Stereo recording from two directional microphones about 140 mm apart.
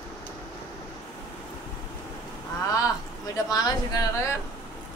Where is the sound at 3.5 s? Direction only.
25° left (ahead or behind).